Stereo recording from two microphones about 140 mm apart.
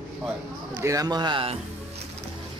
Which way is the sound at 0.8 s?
25° right (ahead or behind).